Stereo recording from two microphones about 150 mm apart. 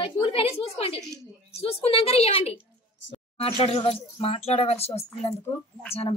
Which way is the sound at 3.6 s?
40° left (ahead or behind).